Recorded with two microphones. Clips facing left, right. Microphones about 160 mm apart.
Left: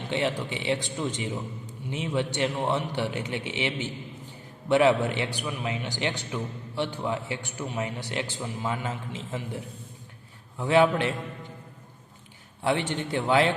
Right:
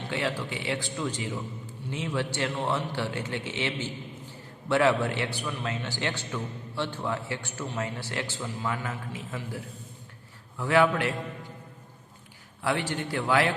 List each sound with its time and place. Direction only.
0.1 s a man's voice: 20° left (ahead or behind)
12.6 s a man's voice: 20° left (ahead or behind)